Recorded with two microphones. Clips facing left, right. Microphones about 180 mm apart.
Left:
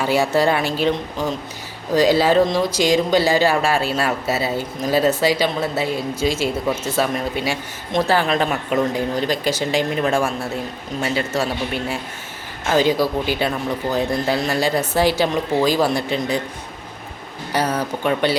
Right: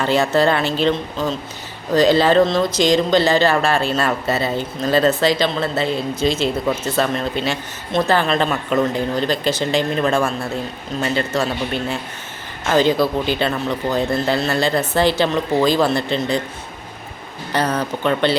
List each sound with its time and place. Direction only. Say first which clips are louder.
0.0 s speech: right 1 dB; 10° left (ahead or behind)
17.5 s speech: right 1 dB; 10° left (ahead or behind)